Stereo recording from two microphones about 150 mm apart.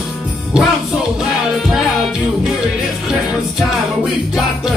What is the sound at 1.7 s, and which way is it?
Music, centre (ahead or behind).